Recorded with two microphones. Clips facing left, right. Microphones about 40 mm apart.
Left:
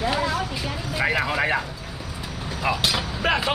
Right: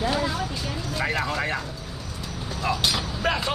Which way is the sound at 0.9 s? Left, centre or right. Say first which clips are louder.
Left 4 dB; centre.